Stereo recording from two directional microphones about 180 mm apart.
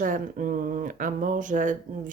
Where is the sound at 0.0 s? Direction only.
50° right (ahead or behind).